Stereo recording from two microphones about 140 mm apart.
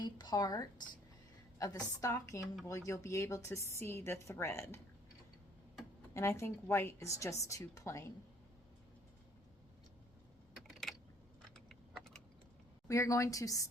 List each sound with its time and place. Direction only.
0.0 s a woman's voice: 30° left (ahead or behind)
11.5 s typing: 5° left (ahead or behind)
12.9 s a woman's voice: 20° left (ahead or behind)